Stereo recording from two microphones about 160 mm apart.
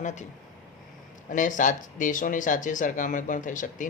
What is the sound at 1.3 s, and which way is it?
Speech, 55° left (ahead or behind).